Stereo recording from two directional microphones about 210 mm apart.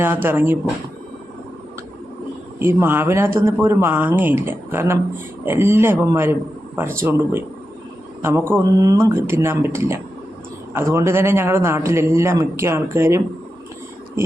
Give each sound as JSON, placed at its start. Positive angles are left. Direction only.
{"t": 0.0, "sound": "a man's voice", "side_deg": -10}
{"t": 2.6, "sound": "a man's voice", "side_deg": -10}